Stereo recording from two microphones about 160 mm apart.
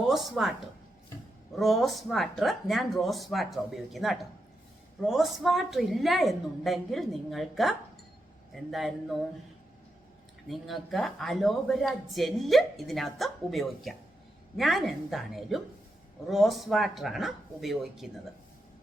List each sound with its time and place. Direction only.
0.1 s a woman's voice: centre (ahead or behind)
1.5 s speech: centre (ahead or behind)
10.5 s speech: centre (ahead or behind)